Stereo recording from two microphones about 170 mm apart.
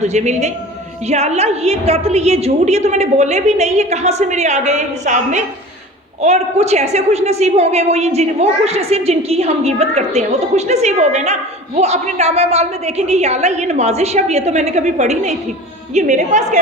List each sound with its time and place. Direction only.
0.0 s a woman's voice: 40° right (ahead or behind)